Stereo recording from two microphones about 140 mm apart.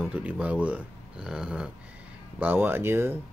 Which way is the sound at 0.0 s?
10° right (ahead or behind).